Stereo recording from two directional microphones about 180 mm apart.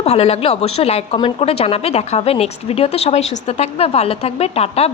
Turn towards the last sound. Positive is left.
turn(degrees=35)  # may be behind; listen again after turning